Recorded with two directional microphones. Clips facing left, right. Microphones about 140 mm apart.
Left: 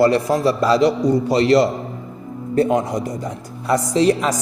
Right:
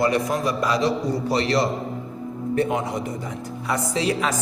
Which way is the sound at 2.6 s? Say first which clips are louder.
Left 7 dB; 40° left (ahead or behind).